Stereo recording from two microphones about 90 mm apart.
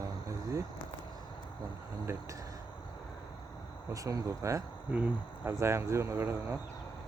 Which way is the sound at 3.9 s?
40° right (ahead or behind).